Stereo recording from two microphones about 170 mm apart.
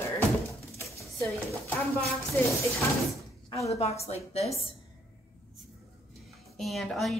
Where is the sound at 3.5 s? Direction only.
20° left (ahead or behind).